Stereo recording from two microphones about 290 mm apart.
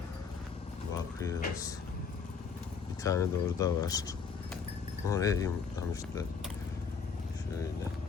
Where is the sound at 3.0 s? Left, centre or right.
Centre.